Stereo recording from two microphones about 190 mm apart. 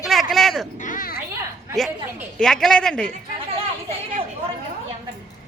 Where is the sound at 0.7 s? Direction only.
45° left (ahead or behind).